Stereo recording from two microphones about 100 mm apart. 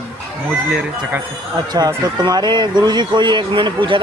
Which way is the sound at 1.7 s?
45° right (ahead or behind).